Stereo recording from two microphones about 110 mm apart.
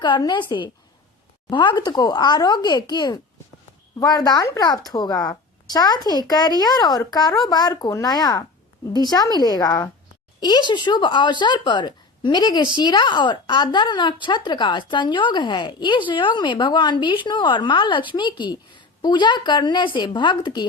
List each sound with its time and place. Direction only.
0.0 s speech: 40° left (ahead or behind)